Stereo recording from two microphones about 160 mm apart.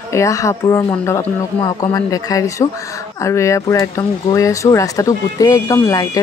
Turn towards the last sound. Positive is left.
turn(degrees=20)  # may be behind; listen again after turning